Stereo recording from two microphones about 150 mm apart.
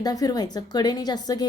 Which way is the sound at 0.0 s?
25° left (ahead or behind).